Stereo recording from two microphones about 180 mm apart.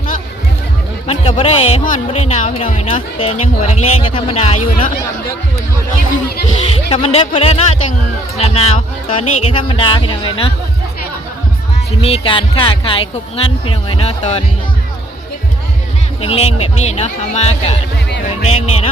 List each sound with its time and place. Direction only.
1.0 s speech: 35° left (ahead or behind)
6.6 s speech: 35° left (ahead or behind)
12.0 s speech: 30° left (ahead or behind)
16.2 s speech: 35° left (ahead or behind)